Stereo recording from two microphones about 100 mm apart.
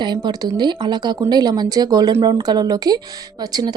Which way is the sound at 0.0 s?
45° right (ahead or behind).